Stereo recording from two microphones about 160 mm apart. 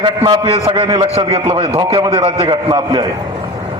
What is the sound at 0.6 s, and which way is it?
A man's voice, 25° right (ahead or behind).